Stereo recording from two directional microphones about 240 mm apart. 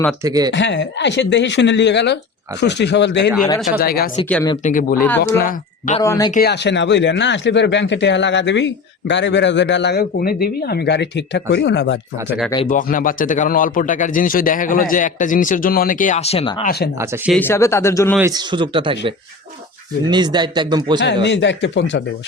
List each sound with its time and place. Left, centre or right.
0.2 s speech: centre
0.5 s speech: left
6.0 s speech: centre
6.3 s speech: left
12.6 s speech: left
17.3 s speech: centre
18.2 s speech: centre
21.0 s speech: left